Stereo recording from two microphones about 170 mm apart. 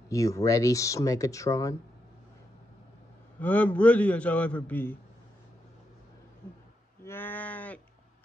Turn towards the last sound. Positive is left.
turn(degrees=10)  # may be behind; listen again after turning